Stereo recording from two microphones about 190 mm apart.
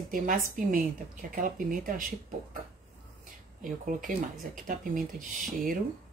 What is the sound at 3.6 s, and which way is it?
A woman's voice, 45° right (ahead or behind).